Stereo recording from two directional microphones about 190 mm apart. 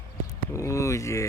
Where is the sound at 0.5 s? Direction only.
15° left (ahead or behind).